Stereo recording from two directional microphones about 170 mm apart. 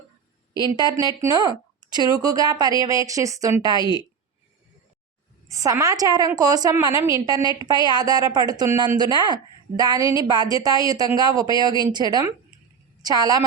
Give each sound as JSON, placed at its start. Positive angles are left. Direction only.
{"t": 0.7, "sound": "a woman's voice", "side_deg": -20}
{"t": 5.5, "sound": "a woman's voice", "side_deg": -20}